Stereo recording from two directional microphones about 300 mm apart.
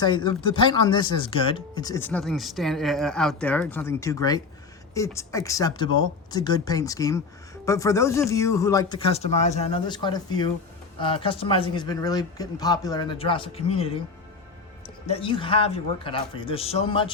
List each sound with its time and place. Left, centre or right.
0.0 s speech: centre